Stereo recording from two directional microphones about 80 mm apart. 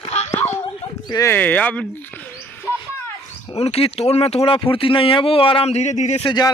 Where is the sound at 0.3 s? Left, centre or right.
Left.